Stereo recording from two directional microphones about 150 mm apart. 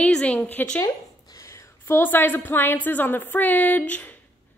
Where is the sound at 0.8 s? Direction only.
25° left (ahead or behind).